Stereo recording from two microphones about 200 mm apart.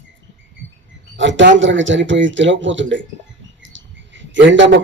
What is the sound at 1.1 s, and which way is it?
A man's voice, 65° right (ahead or behind).